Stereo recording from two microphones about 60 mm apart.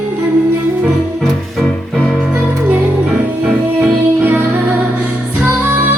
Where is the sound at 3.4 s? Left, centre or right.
Right.